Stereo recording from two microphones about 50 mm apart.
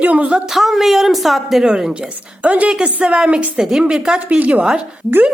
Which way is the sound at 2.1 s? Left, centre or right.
Right.